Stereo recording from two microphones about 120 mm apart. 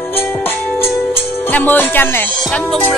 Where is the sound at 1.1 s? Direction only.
20° left (ahead or behind).